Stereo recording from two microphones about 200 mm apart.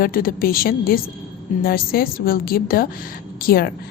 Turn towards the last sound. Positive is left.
turn(degrees=50)  # may be behind; listen again after turning